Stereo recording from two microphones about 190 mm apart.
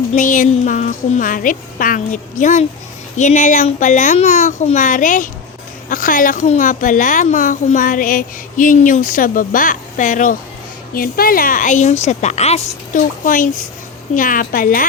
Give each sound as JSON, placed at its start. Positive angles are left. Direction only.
{"t": 0.1, "sound": "a woman's voice", "side_deg": 45}